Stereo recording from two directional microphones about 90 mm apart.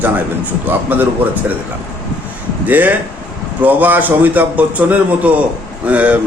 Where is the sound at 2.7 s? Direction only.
20° right (ahead or behind).